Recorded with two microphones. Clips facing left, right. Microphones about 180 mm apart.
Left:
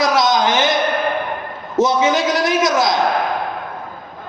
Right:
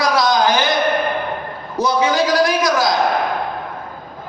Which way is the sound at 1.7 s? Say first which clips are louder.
Left 2 dB; 20° left (ahead or behind).